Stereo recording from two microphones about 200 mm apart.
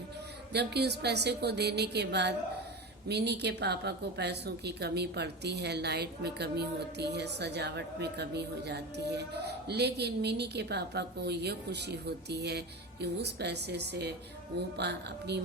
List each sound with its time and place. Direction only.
0.5 s a woman's voice: 55° right (ahead or behind)